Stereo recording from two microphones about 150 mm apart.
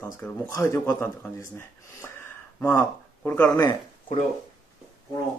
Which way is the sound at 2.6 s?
15° left (ahead or behind).